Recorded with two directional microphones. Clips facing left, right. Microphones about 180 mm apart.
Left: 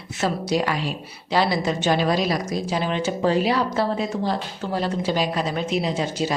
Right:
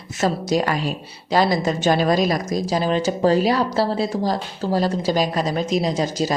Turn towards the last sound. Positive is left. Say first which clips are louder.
# right 3 dB
turn(degrees=-40)  # may be behind; listen again after turning